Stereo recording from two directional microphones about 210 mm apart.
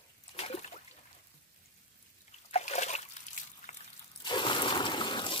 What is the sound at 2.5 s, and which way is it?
Splash, 30° left (ahead or behind).